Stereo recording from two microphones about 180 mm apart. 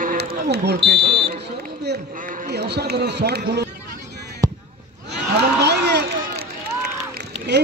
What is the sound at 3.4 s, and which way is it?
Speech, 60° right (ahead or behind).